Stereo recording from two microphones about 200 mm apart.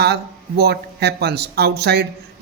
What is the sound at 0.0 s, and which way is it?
A man's voice, 55° right (ahead or behind).